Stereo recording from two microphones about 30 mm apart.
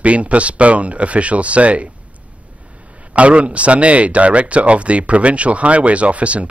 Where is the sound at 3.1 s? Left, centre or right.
Right.